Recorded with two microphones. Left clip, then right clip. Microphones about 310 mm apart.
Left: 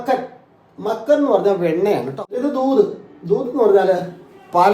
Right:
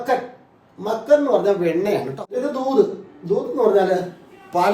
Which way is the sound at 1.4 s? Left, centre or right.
Centre.